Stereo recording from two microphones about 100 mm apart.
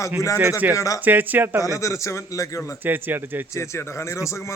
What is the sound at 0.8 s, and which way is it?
Speech, 35° left (ahead or behind).